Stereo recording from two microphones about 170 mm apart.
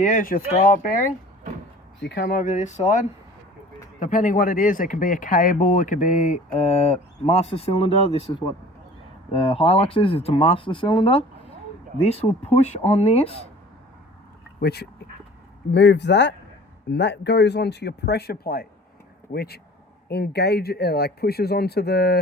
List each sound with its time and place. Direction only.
0.0 s speech: 50° left (ahead or behind)
2.0 s speech: 85° left; by 3.0 s 45° left (ahead or behind)
4.0 s speech: 50° left (ahead or behind)
14.6 s speech: 70° left (ahead or behind)
15.7 s speech: 90° left; by 22.2 s 70° left (ahead or behind)